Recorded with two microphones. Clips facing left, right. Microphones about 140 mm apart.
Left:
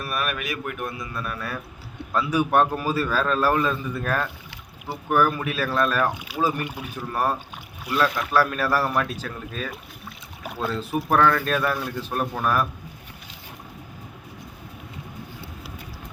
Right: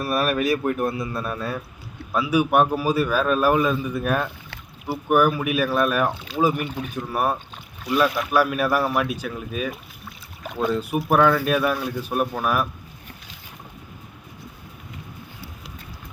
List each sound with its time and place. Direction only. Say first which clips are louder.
0.0 s speech: right 7 dB; 35° right (ahead or behind)
2.1 s a man's voice: right 2 dB; 10° right (ahead or behind)
6.1 s speech: right 2 dB; 10° left (ahead or behind)
6.4 s a man's voice: right 3 dB; 15° right (ahead or behind)